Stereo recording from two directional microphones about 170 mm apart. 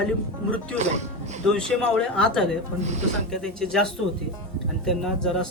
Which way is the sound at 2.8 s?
40° right (ahead or behind).